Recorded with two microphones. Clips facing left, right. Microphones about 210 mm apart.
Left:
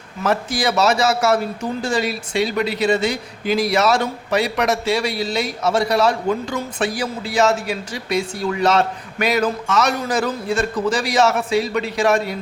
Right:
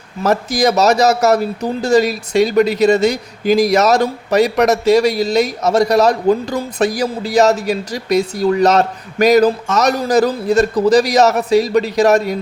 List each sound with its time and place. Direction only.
0.2 s a man's voice: 40° right (ahead or behind)